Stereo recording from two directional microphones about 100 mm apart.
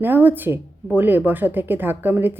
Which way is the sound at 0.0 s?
20° right (ahead or behind).